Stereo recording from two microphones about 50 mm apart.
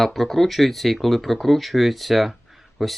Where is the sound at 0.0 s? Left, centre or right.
Centre.